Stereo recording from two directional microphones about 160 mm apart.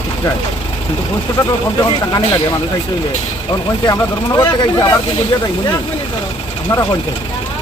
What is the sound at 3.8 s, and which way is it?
Speech, 25° left (ahead or behind).